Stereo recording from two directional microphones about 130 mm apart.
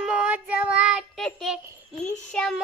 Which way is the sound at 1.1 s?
Centre (ahead or behind).